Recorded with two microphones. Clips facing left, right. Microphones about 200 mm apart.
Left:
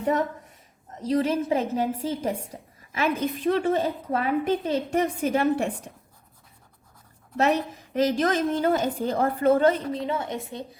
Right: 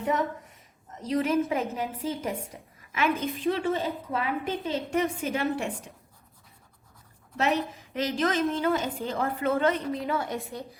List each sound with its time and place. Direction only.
1.0 s a woman's voice: 30° left (ahead or behind)
7.9 s a woman's voice: 40° left (ahead or behind); by 10.7 s 20° left (ahead or behind)